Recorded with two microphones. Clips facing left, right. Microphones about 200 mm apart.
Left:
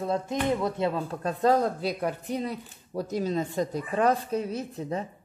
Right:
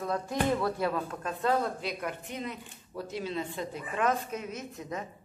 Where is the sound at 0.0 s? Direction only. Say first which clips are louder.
Left 3 dB; 25° left (ahead or behind).